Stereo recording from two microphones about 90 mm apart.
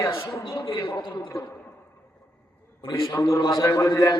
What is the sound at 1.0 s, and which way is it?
Speech, 65° left (ahead or behind).